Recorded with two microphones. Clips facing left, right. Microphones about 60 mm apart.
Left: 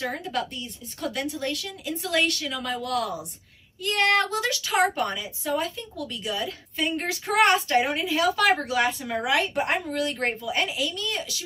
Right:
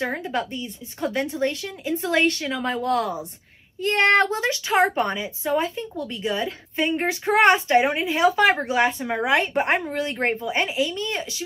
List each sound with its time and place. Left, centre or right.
0.0 s a woman's voice: right